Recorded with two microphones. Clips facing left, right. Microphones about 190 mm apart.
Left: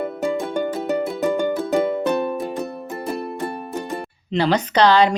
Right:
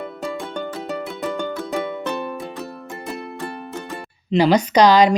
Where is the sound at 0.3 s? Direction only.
15° left (ahead or behind).